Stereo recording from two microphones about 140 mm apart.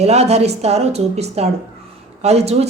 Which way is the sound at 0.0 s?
50° right (ahead or behind).